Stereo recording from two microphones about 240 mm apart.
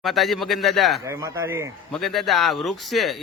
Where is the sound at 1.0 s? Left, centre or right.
Centre.